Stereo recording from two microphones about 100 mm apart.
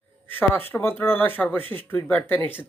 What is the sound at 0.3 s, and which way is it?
Speech, 20° left (ahead or behind).